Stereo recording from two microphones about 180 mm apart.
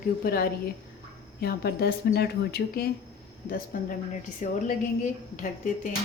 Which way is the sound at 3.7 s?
50° left (ahead or behind).